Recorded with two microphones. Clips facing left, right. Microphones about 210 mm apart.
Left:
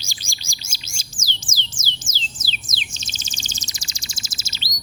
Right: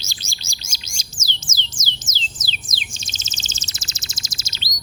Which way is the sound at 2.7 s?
Centre (ahead or behind).